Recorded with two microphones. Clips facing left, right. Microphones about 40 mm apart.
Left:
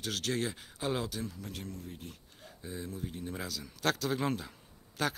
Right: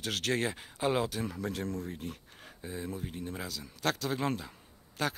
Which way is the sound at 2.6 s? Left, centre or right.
Centre.